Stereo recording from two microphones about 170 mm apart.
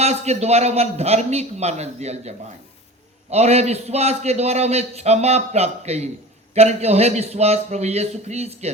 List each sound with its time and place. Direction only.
0.0 s a man's voice: 40° right (ahead or behind)